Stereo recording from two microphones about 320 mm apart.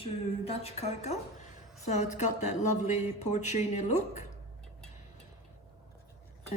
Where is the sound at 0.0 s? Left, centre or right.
Centre.